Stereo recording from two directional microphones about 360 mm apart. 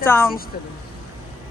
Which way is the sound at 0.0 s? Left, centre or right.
Centre.